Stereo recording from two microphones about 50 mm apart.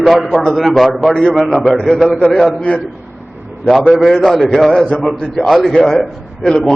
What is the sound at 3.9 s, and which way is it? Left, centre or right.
A man's voice, centre.